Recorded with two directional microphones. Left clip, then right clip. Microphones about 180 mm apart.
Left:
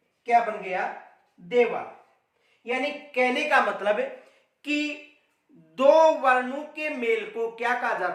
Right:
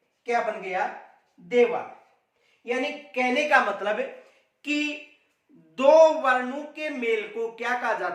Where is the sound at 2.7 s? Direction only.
20° left (ahead or behind).